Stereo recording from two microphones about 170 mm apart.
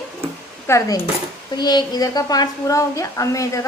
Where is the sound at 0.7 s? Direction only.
15° left (ahead or behind).